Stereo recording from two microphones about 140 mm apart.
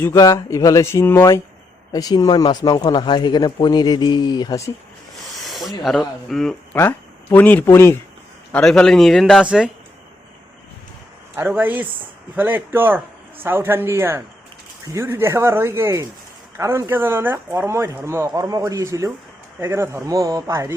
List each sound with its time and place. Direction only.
0.0 s speech: 20° left (ahead or behind)
1.9 s speech: 25° left (ahead or behind)
5.4 s speech: centre (ahead or behind)
6.7 s speech: 15° left (ahead or behind)
8.5 s speech: 5° left (ahead or behind)
11.3 s speech: 15° right (ahead or behind)